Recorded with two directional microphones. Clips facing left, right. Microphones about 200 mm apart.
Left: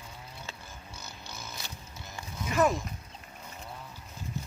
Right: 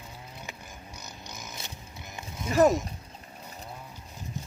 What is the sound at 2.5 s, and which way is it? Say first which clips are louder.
Speech: right 5 dB; 40° right (ahead or behind).